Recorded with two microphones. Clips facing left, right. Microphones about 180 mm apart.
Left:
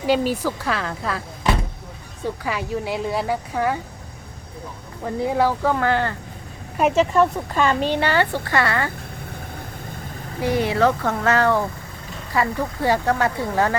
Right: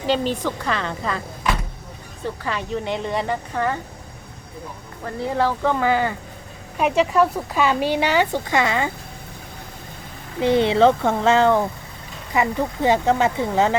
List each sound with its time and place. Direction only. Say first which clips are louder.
0.0 s speech: left 1 dB; 10° left (ahead or behind)
1.5 s vehicle: left 2 dB; 30° left (ahead or behind)
2.4 s a woman's voice: right 1 dB; 10° left (ahead or behind)
5.0 s a woman's voice: left 2 dB; 10° left (ahead or behind)
5.8 s a woman's voice: right 1 dB; 5° right (ahead or behind)
10.4 s speech: right 4 dB; 25° right (ahead or behind)